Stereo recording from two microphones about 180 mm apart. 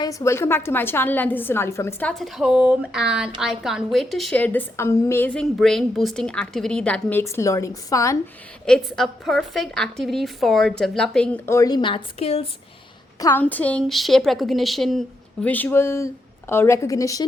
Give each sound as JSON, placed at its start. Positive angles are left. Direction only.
{"t": 0.0, "sound": "a woman's voice", "side_deg": 20}
{"t": 8.6, "sound": "a woman's voice", "side_deg": 0}
{"t": 13.1, "sound": "a woman's voice", "side_deg": 20}
{"t": 13.4, "sound": "a woman's voice", "side_deg": 10}